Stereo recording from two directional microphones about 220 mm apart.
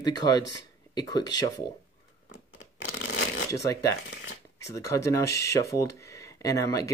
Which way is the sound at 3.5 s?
15° left (ahead or behind).